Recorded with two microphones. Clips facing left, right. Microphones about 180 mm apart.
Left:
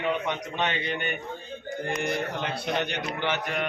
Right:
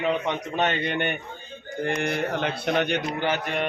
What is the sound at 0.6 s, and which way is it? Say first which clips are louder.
Speech: right 5 dB; 50° right (ahead or behind).